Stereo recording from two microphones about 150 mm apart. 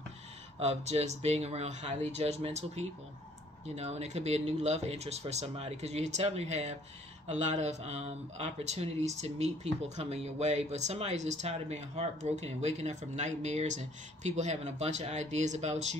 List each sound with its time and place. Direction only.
0.6 s speech: 45° right (ahead or behind)